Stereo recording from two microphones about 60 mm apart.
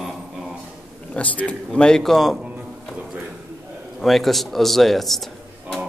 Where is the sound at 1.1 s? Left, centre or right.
Left; by 2.3 s centre.